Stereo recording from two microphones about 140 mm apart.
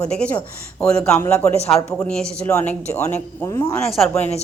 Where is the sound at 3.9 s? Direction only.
Centre (ahead or behind).